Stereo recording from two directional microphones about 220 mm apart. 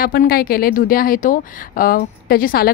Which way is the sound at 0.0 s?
40° left (ahead or behind).